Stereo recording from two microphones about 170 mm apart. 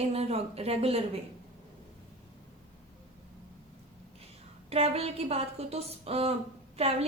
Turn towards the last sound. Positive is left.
turn(degrees=-35)  # may be behind; listen again after turning